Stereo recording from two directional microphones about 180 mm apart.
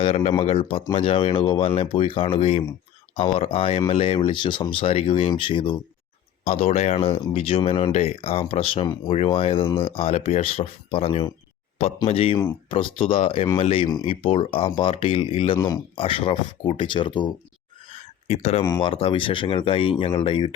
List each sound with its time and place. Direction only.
0.0 s speech: 35° left (ahead or behind)
17.8 s a sound: 35° left (ahead or behind)
18.6 s speech: 25° left (ahead or behind)